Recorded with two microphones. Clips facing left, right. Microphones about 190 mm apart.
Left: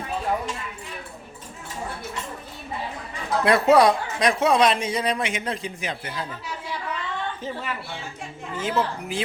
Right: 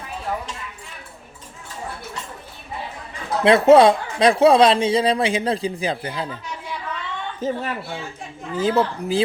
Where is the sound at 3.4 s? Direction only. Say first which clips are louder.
Right 5 dB; 25° right (ahead or behind).